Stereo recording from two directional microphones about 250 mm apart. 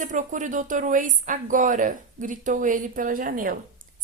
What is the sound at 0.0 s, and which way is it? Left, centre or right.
A woman's voice, right.